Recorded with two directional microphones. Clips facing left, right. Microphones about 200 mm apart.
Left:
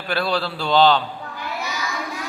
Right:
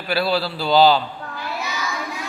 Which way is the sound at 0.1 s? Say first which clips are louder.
Right 2 dB; 5° right (ahead or behind).